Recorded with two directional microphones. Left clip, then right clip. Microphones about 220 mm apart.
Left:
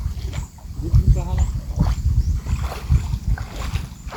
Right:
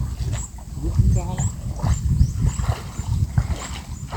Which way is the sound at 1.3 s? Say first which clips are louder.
Left 1 dB; 10° left (ahead or behind).